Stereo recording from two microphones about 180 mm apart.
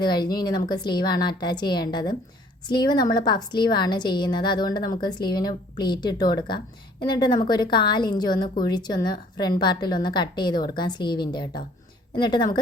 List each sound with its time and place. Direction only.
0.0 s a woman's voice: 25° left (ahead or behind)